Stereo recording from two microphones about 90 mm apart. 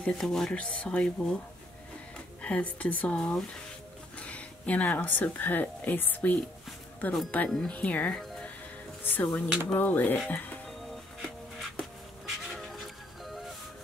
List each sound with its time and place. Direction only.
0.0 s speech: 5° left (ahead or behind)
2.4 s speech: 15° left (ahead or behind)
7.4 s speech: 5° left (ahead or behind)
10.9 s music: centre (ahead or behind)